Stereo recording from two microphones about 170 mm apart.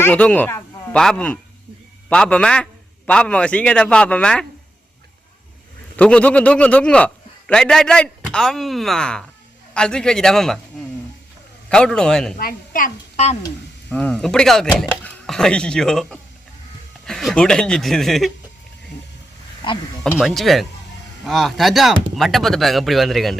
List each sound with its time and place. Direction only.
0.0 s a sound: 10° left (ahead or behind)
0.9 s a man's voice: 5° left (ahead or behind)
6.0 s a man's voice: 5° left (ahead or behind)
11.7 s speech: 5° left (ahead or behind)
12.4 s a child's voice: 55° left (ahead or behind)
13.9 s speech: 5° left (ahead or behind)
20.1 s speech: centre (ahead or behind)